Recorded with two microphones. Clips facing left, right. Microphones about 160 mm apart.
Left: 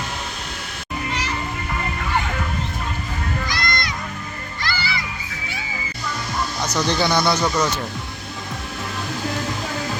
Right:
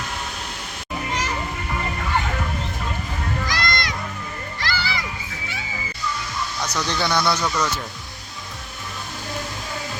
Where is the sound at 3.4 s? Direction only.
90° right.